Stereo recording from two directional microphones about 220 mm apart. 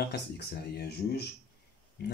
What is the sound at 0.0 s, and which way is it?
A man's voice, 45° left (ahead or behind).